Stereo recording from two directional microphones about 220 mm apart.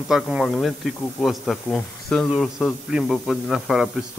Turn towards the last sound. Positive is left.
turn(degrees=0)  # may be behind; listen again after turning